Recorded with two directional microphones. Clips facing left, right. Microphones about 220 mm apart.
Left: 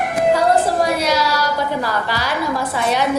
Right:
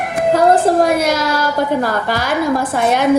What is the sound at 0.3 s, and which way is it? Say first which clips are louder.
A woman's voice: right 9 dB; 50° right (ahead or behind).